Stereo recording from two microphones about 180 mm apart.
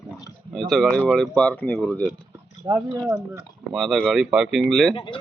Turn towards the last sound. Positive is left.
turn(degrees=25)  # may be behind; listen again after turning